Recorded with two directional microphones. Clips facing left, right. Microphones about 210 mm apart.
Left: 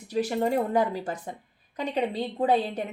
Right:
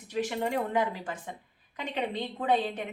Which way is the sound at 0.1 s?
35° left (ahead or behind).